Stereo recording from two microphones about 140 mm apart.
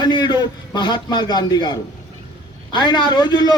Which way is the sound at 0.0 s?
35° left (ahead or behind).